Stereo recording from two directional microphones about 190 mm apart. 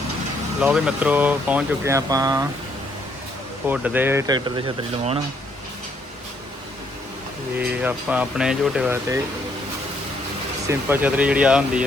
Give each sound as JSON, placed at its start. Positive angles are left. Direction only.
{"t": 0.6, "sound": "speech", "side_deg": -5}
{"t": 3.7, "sound": "speech", "side_deg": -10}
{"t": 7.6, "sound": "speech", "side_deg": -5}
{"t": 10.7, "sound": "speech", "side_deg": -10}